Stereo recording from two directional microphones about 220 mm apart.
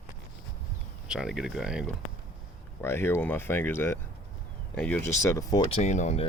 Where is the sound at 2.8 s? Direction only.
10° left (ahead or behind).